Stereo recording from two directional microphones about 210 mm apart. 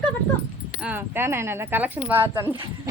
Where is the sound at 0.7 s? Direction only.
5° right (ahead or behind).